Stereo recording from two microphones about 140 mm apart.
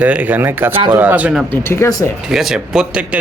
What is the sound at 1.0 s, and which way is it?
Speech, 10° right (ahead or behind).